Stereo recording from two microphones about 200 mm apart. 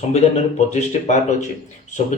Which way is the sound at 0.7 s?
35° left (ahead or behind).